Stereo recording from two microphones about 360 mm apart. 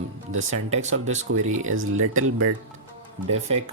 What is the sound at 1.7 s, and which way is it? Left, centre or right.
Speech, right.